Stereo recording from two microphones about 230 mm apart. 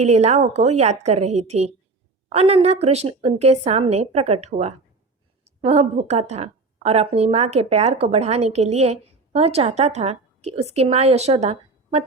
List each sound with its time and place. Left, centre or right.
0.0 s a woman's voice: right